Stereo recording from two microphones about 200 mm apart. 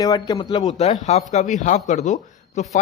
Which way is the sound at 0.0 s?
20° left (ahead or behind).